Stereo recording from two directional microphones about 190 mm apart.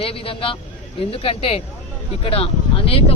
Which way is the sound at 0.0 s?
30° left (ahead or behind).